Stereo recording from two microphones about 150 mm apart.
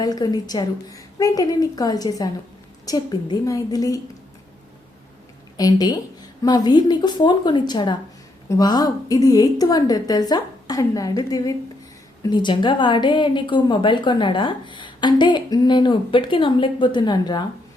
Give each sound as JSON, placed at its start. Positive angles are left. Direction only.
{"t": 0.0, "sound": "a woman's voice", "side_deg": 25}
{"t": 5.5, "sound": "a woman's voice", "side_deg": 25}